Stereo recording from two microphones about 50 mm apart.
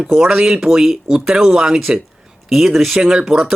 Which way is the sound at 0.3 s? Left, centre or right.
Centre.